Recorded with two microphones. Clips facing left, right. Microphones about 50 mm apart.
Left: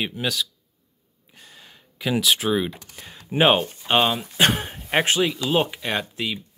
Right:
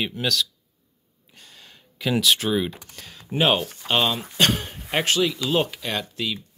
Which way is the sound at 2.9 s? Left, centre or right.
Centre.